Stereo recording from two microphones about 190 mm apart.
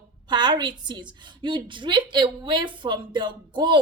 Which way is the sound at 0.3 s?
25° right (ahead or behind).